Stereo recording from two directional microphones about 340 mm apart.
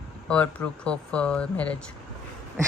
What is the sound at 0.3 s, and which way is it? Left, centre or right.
Speech, centre.